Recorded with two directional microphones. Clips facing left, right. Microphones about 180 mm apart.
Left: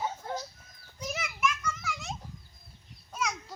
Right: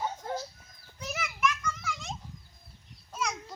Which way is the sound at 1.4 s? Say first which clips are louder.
Right 1 dB; 5° left (ahead or behind).